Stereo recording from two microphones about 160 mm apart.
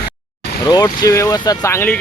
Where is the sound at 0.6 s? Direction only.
25° left (ahead or behind).